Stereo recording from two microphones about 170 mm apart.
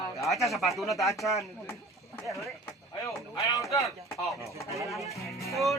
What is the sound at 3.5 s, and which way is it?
Speech, 20° left (ahead or behind).